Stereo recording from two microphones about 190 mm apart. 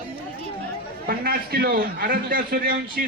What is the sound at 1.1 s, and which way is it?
A man's voice, 55° right (ahead or behind).